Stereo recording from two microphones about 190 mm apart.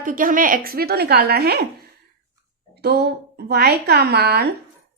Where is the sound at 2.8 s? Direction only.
60° right (ahead or behind).